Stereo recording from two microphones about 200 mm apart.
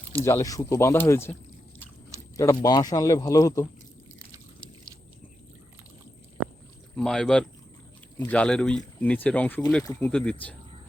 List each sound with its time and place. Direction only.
0.3 s speech: 15° left (ahead or behind)
2.3 s speech: 15° left (ahead or behind)
6.9 s speech: 5° left (ahead or behind)